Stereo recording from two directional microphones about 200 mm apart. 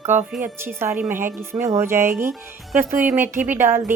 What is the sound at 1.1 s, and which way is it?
Speech, 40° right (ahead or behind).